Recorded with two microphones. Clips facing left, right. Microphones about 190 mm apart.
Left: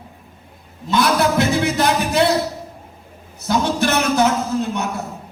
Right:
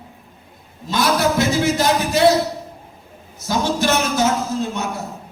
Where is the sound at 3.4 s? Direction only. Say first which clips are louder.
Left 1 dB; 60° left (ahead or behind).